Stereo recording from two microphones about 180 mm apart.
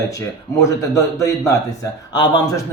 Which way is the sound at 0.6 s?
15° left (ahead or behind).